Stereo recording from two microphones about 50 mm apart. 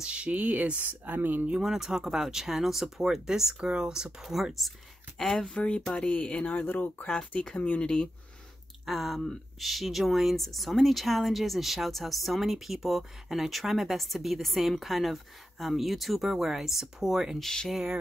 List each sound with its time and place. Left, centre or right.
0.0 s speech: right
0.4 s speech: right
1.6 s speech: centre
5.9 s speech: left
6.4 s speech: left
7.8 s speech: centre
8.8 s speech: centre
17.4 s speech: centre